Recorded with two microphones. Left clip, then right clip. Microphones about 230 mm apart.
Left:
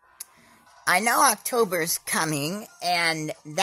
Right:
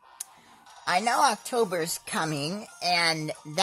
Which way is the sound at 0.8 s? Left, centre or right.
Left.